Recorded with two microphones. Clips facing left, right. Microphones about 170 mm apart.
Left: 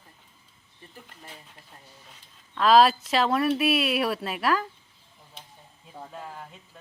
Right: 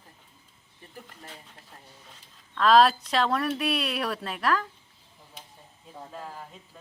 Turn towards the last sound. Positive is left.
turn(degrees=0)  # may be behind; listen again after turning